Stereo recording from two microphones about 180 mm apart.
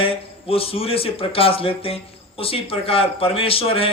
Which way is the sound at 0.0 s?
30° left (ahead or behind).